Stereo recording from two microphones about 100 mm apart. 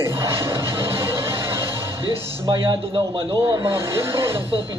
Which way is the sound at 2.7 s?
60° right (ahead or behind).